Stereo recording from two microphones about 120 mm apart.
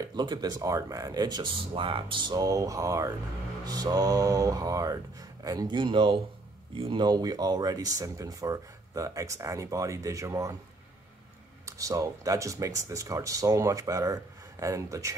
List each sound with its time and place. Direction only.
0.0 s speech: 35° right (ahead or behind)
1.6 s speech: 50° right (ahead or behind); by 10.5 s 25° right (ahead or behind)
11.6 s speech: 25° right (ahead or behind)